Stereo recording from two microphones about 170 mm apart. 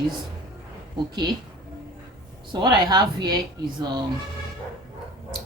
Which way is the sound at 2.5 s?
25° right (ahead or behind).